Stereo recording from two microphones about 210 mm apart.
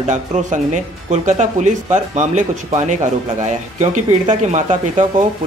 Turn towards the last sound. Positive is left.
turn(degrees=-40)  # may be behind; listen again after turning